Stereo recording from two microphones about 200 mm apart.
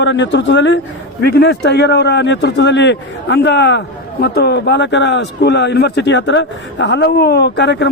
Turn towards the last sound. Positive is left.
turn(degrees=60)  # may be behind; listen again after turning